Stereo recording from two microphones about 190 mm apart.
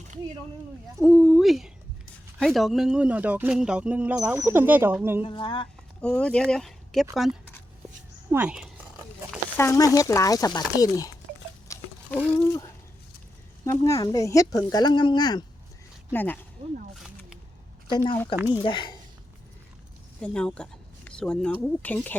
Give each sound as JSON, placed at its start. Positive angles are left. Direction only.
{"t": 0.9, "sound": "speech", "side_deg": 0}
{"t": 5.2, "sound": "speech", "side_deg": 25}
{"t": 6.0, "sound": "speech", "side_deg": 5}
{"t": 8.3, "sound": "speech", "side_deg": -10}
{"t": 9.6, "sound": "speech", "side_deg": 15}
{"t": 11.7, "sound": "patter", "side_deg": 15}
{"t": 12.5, "sound": "a sound", "side_deg": 15}
{"t": 13.7, "sound": "speech", "side_deg": 15}
{"t": 16.1, "sound": "speech", "side_deg": 10}
{"t": 16.9, "sound": "a sound", "side_deg": 0}
{"t": 17.8, "sound": "speech", "side_deg": 25}
{"t": 20.2, "sound": "speech", "side_deg": 5}